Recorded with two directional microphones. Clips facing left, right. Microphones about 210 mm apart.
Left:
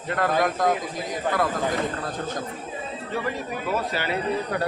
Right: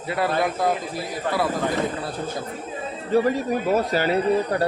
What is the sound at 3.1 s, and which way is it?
Speech, 40° right (ahead or behind).